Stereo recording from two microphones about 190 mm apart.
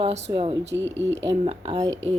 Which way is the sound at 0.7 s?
70° right (ahead or behind).